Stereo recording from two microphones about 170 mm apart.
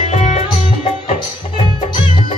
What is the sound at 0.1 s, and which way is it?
Music, 40° left (ahead or behind).